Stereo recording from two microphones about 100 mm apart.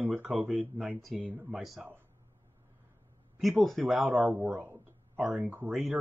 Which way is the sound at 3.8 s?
Centre (ahead or behind).